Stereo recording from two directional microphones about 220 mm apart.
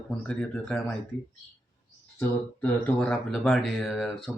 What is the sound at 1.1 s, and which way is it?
Speech, 55° left (ahead or behind).